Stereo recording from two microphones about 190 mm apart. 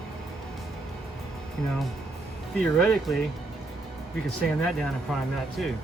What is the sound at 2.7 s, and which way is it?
Speech, 5° left (ahead or behind).